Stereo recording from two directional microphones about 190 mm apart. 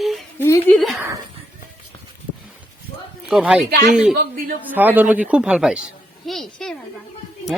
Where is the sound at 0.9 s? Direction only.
15° right (ahead or behind).